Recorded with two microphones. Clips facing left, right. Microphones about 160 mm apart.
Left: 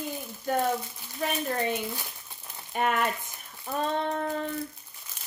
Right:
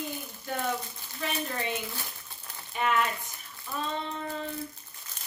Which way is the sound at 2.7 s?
50° left (ahead or behind).